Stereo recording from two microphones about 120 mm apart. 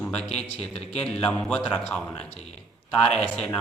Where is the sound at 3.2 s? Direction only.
10° left (ahead or behind).